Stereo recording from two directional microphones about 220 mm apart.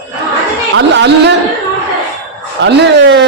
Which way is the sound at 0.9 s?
50° right (ahead or behind).